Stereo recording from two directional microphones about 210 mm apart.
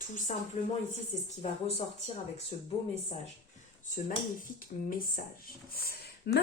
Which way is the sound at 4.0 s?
35° left (ahead or behind).